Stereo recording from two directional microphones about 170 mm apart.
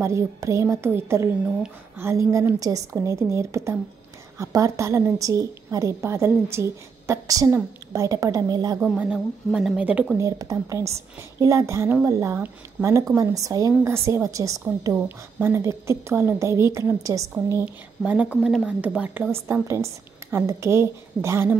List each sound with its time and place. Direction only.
0.0 s a woman's voice: 15° right (ahead or behind)
8.8 s a woman's voice: 5° right (ahead or behind)
10.2 s a woman's voice: 20° right (ahead or behind)
18.4 s a woman's voice: 5° left (ahead or behind)
18.7 s a woman's voice: 10° right (ahead or behind)